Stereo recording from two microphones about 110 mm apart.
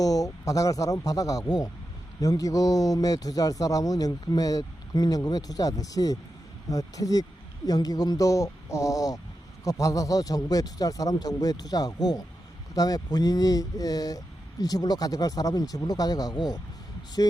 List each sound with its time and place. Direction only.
0.0 s a man's voice: 35° left (ahead or behind)